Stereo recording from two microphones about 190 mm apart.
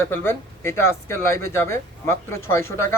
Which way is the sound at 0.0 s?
10° left (ahead or behind).